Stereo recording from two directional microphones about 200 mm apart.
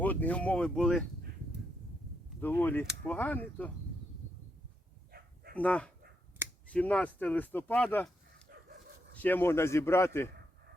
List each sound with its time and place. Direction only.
0.0 s speech: 10° left (ahead or behind)
2.4 s speech: 10° left (ahead or behind)
5.1 s dog: 50° right (ahead or behind)
5.5 s speech: 5° left (ahead or behind)
9.1 s speech: 10° left (ahead or behind)